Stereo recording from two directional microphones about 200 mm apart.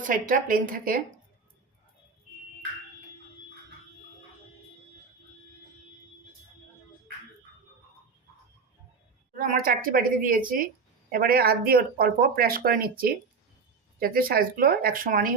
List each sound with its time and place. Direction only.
0.0 s speech: 40° right (ahead or behind)
9.3 s speech: 45° right (ahead or behind)